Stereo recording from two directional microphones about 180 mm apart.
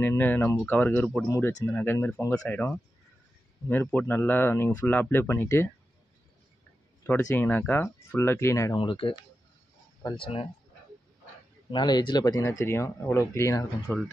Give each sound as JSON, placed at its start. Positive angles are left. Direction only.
{"t": 0.0, "sound": "speech", "side_deg": 10}
{"t": 7.0, "sound": "speech", "side_deg": 10}
{"t": 8.7, "sound": "speech", "side_deg": 30}
{"t": 11.7, "sound": "speech", "side_deg": 25}